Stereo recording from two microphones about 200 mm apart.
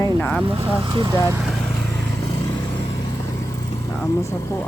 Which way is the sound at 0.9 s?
20° right (ahead or behind).